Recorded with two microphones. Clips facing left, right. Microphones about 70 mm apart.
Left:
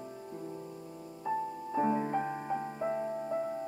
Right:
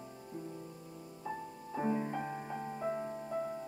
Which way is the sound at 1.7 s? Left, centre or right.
Centre.